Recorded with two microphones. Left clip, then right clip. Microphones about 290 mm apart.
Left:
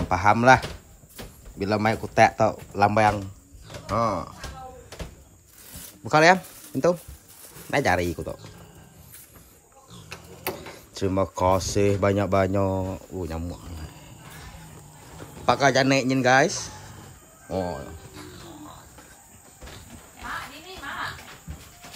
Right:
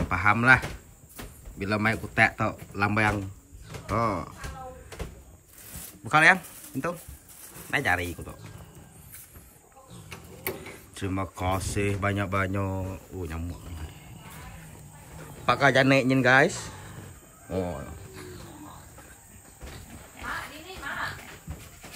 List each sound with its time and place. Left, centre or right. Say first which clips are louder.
0.1 s speech: left 3 dB; centre
1.6 s speech: left 3 dB; centre
6.0 s speech: left 2 dB; centre
11.0 s speech: left 9 dB; centre
15.4 s speech: left 1 dB; centre
17.5 s speech: left 3 dB; centre